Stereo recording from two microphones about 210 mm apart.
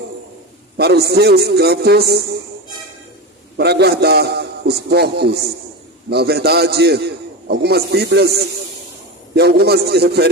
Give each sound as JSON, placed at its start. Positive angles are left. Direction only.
{"t": 0.8, "sound": "a man's voice", "side_deg": -50}
{"t": 3.6, "sound": "a man's voice", "side_deg": -50}
{"t": 9.3, "sound": "a man's voice", "side_deg": -50}